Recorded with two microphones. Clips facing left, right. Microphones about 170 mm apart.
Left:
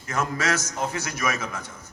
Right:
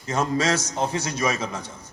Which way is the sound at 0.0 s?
25° right (ahead or behind).